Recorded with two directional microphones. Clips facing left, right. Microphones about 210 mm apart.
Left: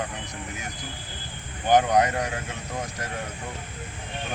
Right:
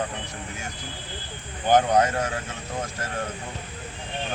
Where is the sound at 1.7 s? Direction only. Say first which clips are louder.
Right 1 dB; 15° left (ahead or behind).